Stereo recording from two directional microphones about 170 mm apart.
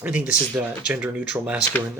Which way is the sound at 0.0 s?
10° right (ahead or behind).